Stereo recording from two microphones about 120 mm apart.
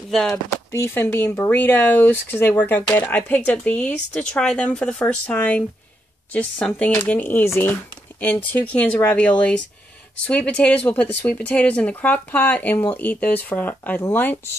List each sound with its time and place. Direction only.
0.1 s speech: 5° left (ahead or behind)
0.7 s speech: 20° left (ahead or behind)